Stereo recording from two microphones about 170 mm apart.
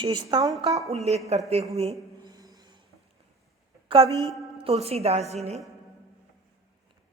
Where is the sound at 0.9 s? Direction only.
40° right (ahead or behind).